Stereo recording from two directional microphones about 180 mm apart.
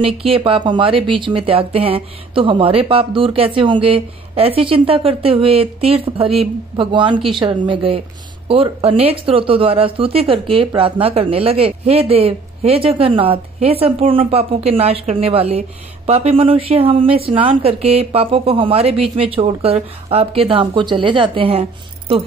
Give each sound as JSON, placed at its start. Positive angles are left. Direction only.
{"t": 0.0, "sound": "speech", "side_deg": -30}